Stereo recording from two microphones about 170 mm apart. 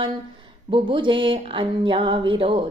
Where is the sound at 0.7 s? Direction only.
30° right (ahead or behind).